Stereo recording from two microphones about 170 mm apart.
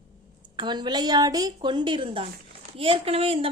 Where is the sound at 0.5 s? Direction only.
25° right (ahead or behind).